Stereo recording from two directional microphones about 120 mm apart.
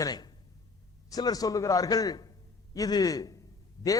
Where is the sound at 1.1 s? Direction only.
30° left (ahead or behind).